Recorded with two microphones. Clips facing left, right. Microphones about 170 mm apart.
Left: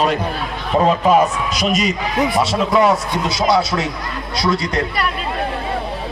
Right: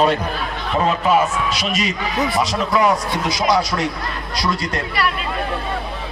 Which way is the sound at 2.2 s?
25° left (ahead or behind).